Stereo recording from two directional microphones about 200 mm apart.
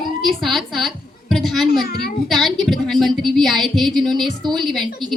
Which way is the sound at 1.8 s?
50° left (ahead or behind).